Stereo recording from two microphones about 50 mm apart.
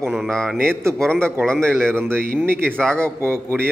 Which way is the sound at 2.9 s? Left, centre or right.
Right.